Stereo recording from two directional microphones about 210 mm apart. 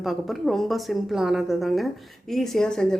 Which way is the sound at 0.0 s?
Centre (ahead or behind).